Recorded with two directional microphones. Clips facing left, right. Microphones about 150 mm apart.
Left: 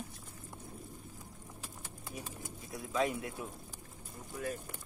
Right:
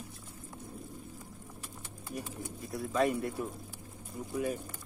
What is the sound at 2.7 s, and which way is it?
Speech, centre (ahead or behind).